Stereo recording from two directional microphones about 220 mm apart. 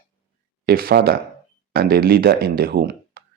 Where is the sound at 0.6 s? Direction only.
45° right (ahead or behind).